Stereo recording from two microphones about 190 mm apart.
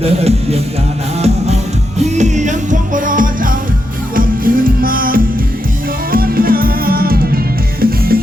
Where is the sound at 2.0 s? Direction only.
35° right (ahead or behind).